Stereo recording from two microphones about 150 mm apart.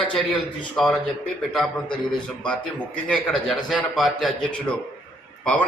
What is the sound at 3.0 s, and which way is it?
A man's voice, 5° left (ahead or behind).